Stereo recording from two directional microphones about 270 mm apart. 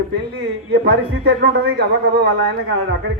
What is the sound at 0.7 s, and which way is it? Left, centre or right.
A man's voice, right.